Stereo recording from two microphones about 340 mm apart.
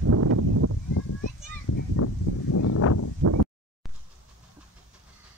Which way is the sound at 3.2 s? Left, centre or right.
Right.